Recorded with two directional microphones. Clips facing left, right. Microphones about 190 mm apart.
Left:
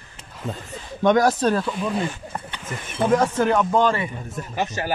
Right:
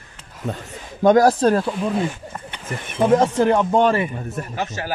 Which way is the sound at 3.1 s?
25° right (ahead or behind).